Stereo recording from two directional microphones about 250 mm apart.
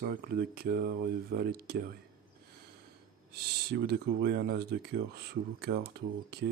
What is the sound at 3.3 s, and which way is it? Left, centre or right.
Speech, right.